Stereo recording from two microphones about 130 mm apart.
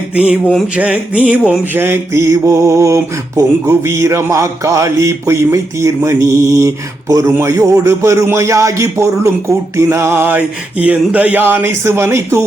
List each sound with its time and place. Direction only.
0.8 s mantra: 10° right (ahead or behind)